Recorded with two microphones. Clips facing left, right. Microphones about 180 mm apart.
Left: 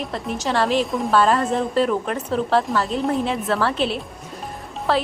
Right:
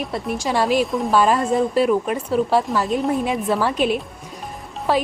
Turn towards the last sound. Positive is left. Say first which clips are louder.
# right 1 dB
turn(degrees=-10)  # may be behind; listen again after turning